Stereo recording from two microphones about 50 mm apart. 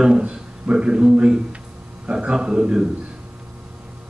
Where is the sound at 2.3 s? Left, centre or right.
Centre.